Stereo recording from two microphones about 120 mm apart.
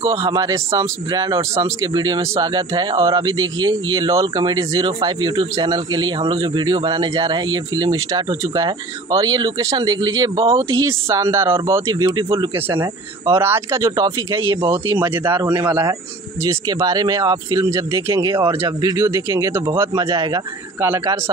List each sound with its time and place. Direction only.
0.2 s speech: 35° right (ahead or behind)
10.5 s speech: 25° right (ahead or behind)
12.1 s speech: 40° right (ahead or behind)
13.4 s speech: 25° right (ahead or behind)
14.9 s speech: 15° right (ahead or behind)
16.4 s speech: 35° right (ahead or behind)